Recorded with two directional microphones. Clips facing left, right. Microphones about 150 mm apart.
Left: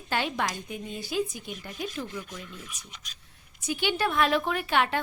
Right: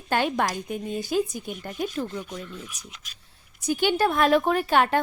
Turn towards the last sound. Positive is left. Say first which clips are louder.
# right 5 dB
turn(degrees=-40)  # may be behind; listen again after turning